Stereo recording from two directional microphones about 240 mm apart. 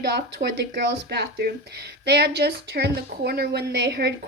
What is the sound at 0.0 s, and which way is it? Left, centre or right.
A woman's voice, right.